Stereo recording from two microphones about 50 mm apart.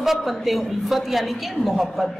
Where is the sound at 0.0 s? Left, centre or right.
Centre.